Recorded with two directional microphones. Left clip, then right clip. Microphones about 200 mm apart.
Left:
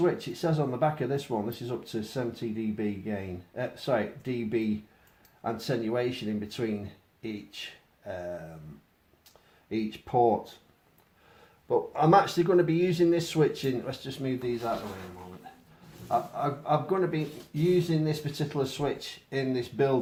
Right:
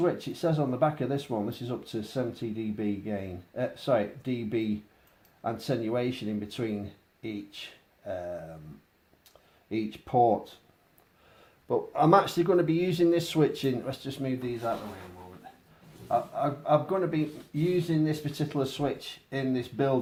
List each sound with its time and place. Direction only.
0.0 s speech: 30° right (ahead or behind)
9.6 s speech: 30° right (ahead or behind)
11.7 s speech: 40° right (ahead or behind)
16.0 s speech: 30° right (ahead or behind)